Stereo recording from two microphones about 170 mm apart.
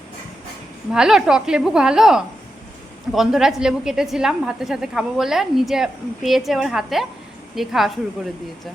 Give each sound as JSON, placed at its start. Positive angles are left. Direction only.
{"t": 0.9, "sound": "a woman's voice", "side_deg": -5}